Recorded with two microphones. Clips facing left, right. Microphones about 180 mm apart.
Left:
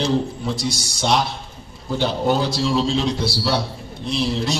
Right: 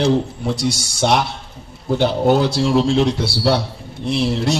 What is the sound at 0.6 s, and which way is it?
Speech, 65° right (ahead or behind).